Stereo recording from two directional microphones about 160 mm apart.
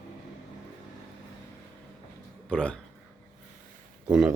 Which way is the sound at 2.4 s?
5° left (ahead or behind).